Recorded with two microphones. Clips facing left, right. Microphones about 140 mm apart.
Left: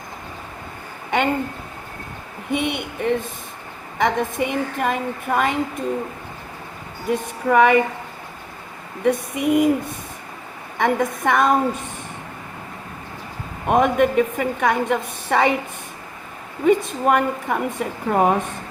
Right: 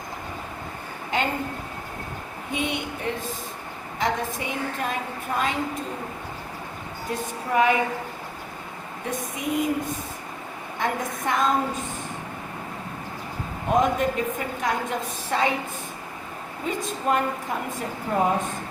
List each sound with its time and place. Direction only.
2.5 s a woman's voice: 60° left (ahead or behind)
7.1 s a woman's voice: 60° left (ahead or behind)
9.0 s a woman's voice: 60° left (ahead or behind)
10.8 s a woman's voice: 65° left (ahead or behind)
13.7 s a woman's voice: 65° left (ahead or behind)
16.6 s a woman's voice: 65° left (ahead or behind)